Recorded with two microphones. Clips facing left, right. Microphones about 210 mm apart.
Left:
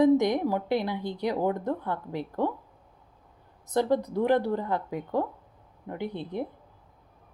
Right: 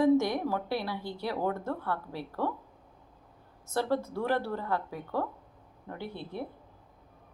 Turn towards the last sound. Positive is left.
turn(degrees=20)  # may be behind; listen again after turning